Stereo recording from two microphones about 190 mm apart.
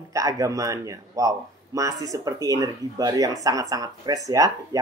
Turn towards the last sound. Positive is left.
turn(degrees=-20)  # may be behind; listen again after turning